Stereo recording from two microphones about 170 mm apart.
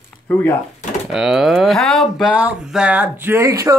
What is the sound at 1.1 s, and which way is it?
Speech, 5° right (ahead or behind).